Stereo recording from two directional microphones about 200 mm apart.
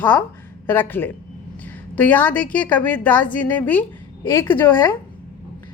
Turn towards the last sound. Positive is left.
turn(degrees=10)  # may be behind; listen again after turning